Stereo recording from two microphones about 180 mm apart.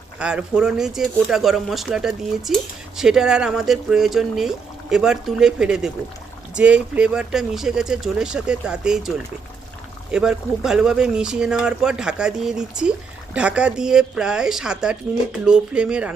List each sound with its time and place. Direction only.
0.2 s speech: 5° right (ahead or behind)